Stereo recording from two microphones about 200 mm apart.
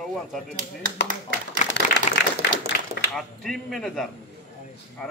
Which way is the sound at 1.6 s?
40° left (ahead or behind).